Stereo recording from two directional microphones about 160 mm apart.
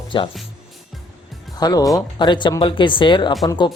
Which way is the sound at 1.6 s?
25° left (ahead or behind).